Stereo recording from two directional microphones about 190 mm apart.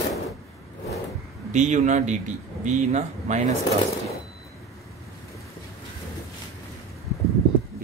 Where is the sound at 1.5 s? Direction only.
40° right (ahead or behind).